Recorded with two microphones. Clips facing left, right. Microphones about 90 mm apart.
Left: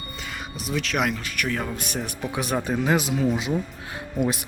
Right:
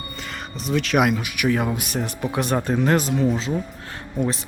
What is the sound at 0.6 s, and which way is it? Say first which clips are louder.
Speech: right 6 dB; centre (ahead or behind).